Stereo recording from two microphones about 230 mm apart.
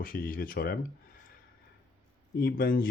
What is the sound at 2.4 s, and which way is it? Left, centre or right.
Speech, left.